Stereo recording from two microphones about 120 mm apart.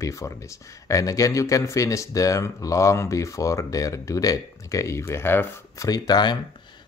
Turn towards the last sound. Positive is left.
turn(degrees=35)  # may be behind; listen again after turning